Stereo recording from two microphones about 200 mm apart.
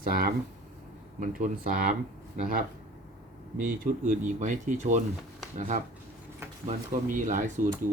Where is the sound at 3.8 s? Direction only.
40° right (ahead or behind).